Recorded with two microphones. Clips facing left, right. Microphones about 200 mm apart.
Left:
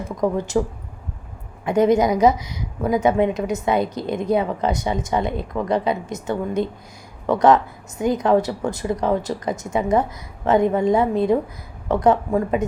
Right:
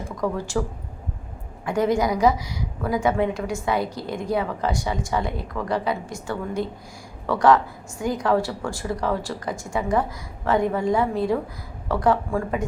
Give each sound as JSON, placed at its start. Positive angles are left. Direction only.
{"t": 0.0, "sound": "a woman's voice", "side_deg": 20}
{"t": 1.6, "sound": "a woman's voice", "side_deg": 20}